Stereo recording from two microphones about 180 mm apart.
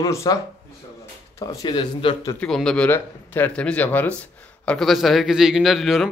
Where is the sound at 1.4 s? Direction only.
20° left (ahead or behind).